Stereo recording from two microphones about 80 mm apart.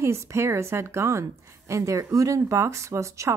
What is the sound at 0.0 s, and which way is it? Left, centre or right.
Speech, right.